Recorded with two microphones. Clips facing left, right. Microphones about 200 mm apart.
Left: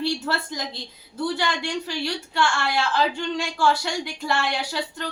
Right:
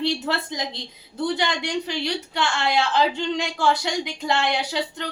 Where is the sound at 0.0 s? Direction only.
20° right (ahead or behind).